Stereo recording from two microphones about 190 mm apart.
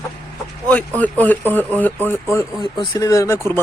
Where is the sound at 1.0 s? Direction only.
10° left (ahead or behind).